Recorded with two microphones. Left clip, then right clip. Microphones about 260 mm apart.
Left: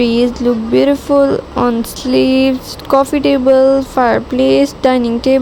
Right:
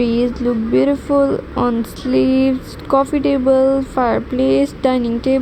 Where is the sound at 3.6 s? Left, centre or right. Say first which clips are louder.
Left 5 dB; left.